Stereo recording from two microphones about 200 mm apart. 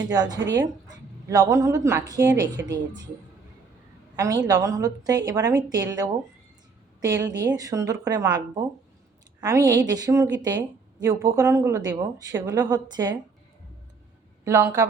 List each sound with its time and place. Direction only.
0.1 s speech: 20° right (ahead or behind)
4.1 s a woman's voice: 15° right (ahead or behind)
9.4 s a woman's voice: 15° right (ahead or behind)
14.4 s a woman's voice: 15° right (ahead or behind)